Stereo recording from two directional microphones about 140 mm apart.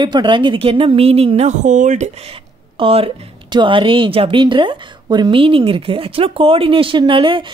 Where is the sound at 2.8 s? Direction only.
40° right (ahead or behind).